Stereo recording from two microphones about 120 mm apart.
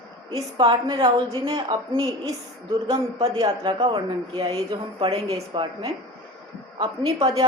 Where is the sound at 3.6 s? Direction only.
45° right (ahead or behind).